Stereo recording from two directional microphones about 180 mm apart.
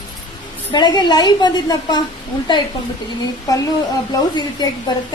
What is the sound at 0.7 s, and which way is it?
A woman's voice, 25° left (ahead or behind).